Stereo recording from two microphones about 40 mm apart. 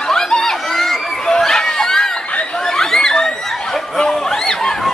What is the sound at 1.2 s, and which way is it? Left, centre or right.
Chatter, centre.